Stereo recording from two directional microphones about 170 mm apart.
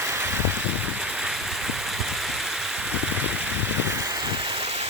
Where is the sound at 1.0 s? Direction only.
5° right (ahead or behind).